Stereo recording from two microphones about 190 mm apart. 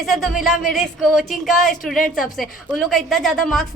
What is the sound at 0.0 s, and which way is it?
A woman's voice, centre (ahead or behind).